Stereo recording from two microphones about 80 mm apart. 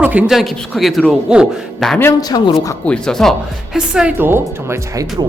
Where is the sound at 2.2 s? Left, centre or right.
Left.